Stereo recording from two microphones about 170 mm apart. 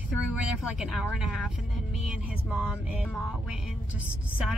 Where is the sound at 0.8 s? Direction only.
Centre (ahead or behind).